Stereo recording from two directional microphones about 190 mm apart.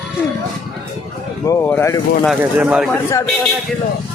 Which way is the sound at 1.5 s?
15° left (ahead or behind).